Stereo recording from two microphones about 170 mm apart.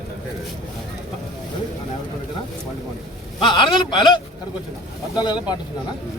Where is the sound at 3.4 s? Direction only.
30° left (ahead or behind).